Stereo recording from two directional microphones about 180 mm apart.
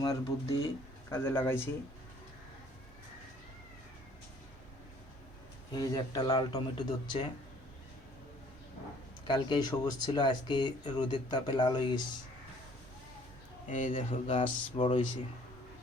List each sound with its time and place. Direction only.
0.0 s speech: 20° left (ahead or behind)
5.7 s speech: 20° left (ahead or behind)
9.2 s speech: 25° left (ahead or behind)
13.7 s a man's voice: 45° left (ahead or behind)
14.3 s speech: 30° left (ahead or behind)